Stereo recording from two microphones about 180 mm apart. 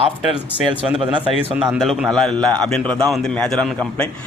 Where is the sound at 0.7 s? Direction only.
25° right (ahead or behind).